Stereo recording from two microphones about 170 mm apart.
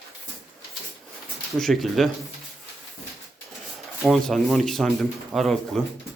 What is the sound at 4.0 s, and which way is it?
Speech, centre (ahead or behind).